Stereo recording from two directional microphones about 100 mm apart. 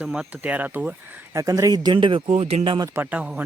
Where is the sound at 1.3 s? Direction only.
35° right (ahead or behind).